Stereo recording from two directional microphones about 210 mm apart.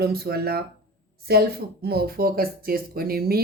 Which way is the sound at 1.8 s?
45° right (ahead or behind).